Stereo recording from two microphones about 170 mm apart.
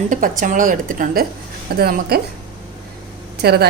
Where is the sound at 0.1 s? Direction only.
50° right (ahead or behind).